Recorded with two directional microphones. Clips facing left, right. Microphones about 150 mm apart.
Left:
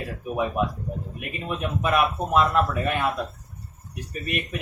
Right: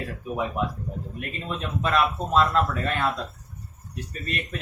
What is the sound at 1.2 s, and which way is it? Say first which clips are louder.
Speech: left 3 dB; 15° left (ahead or behind).